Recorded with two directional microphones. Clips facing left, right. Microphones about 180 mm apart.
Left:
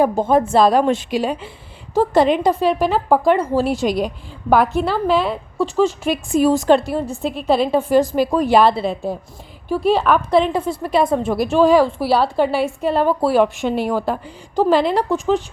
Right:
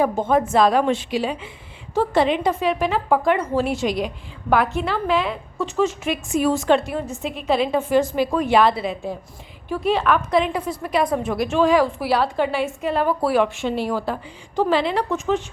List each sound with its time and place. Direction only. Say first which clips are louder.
0.0 s a woman's voice: left 3 dB; 35° left (ahead or behind)